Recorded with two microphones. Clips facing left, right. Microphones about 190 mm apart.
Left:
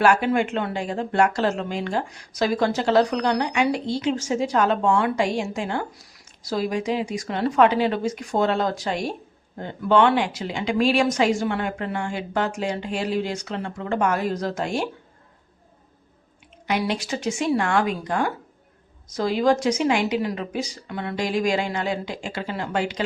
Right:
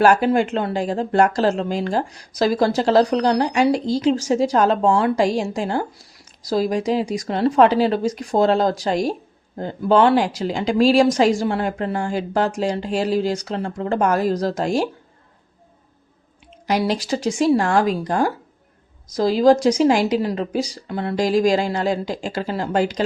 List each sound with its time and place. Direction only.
0.0 s speech: 35° right (ahead or behind)
16.6 s speech: 35° right (ahead or behind)